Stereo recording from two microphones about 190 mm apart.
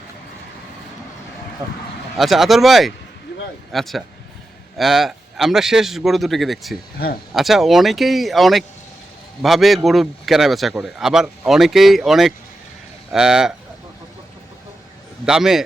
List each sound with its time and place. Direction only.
2.1 s a man's voice: centre (ahead or behind)
7.0 s speech: 55° left (ahead or behind)
7.3 s a man's voice: centre (ahead or behind)
15.3 s a man's voice: centre (ahead or behind)